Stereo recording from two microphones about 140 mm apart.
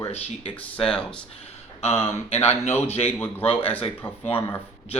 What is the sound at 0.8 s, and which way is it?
Speech, 5° left (ahead or behind).